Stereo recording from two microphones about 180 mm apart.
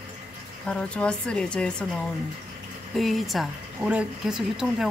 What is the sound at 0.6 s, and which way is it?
Speech, 5° left (ahead or behind).